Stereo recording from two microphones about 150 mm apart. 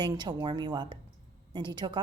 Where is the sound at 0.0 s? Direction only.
30° right (ahead or behind).